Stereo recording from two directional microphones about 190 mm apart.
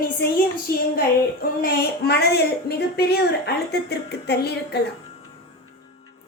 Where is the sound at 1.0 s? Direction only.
50° left (ahead or behind).